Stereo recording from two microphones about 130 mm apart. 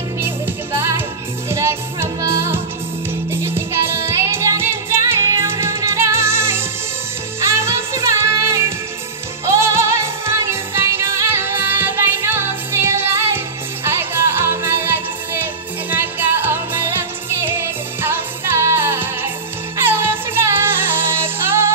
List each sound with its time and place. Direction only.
0.7 s music: 20° right (ahead or behind)